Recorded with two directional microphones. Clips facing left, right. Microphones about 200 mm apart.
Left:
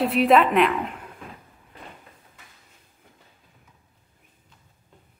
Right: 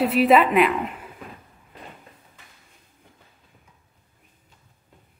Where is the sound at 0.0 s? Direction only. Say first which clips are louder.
Right 1 dB; centre (ahead or behind).